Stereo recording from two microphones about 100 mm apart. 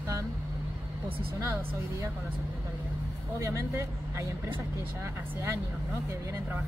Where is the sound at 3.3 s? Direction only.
30° right (ahead or behind).